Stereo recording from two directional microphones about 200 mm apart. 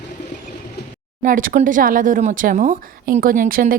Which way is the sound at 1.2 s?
45° right (ahead or behind).